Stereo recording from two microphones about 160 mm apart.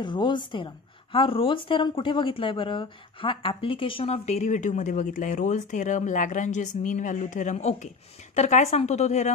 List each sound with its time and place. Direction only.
0.0 s a woman's voice: 30° left (ahead or behind); by 9.3 s 45° left (ahead or behind)